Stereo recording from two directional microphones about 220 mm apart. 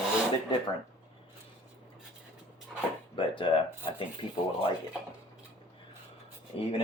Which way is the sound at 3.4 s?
25° left (ahead or behind).